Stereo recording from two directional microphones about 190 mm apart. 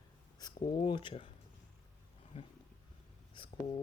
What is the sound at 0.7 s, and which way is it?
Speech, 25° left (ahead or behind).